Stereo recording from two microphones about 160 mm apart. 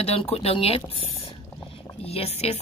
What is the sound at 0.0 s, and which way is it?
Speech, 40° left (ahead or behind).